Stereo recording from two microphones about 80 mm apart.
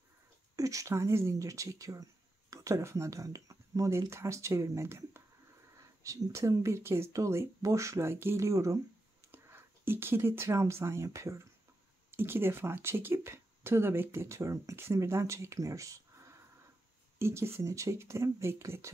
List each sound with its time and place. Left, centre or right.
0.6 s speech: right
9.3 s speech: right
12.1 s speech: right